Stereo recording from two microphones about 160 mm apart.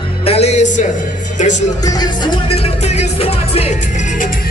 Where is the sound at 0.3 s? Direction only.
40° left (ahead or behind).